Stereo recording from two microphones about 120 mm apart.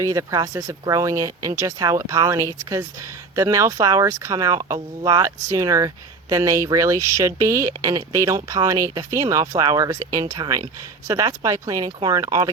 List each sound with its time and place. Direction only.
0.0 s speech: 25° right (ahead or behind)